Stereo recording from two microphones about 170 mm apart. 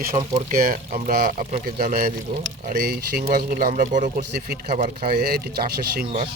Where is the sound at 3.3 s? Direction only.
55° right (ahead or behind).